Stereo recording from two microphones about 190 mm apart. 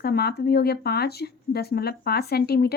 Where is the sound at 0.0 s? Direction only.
55° left (ahead or behind).